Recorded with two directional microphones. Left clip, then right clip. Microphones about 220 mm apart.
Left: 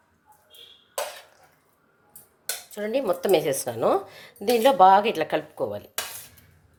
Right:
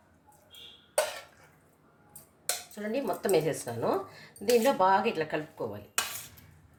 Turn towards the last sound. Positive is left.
turn(degrees=45)  # may be behind; listen again after turning